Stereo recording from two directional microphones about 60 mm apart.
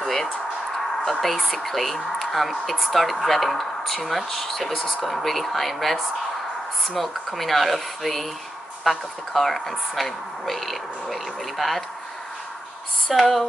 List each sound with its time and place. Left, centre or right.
0.0 s a sound: centre
1.2 s speech: centre
13.2 s speech: centre